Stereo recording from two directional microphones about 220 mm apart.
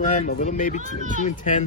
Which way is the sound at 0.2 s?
35° left (ahead or behind).